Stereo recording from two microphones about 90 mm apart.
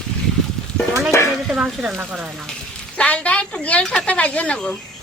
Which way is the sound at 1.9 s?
20° right (ahead or behind).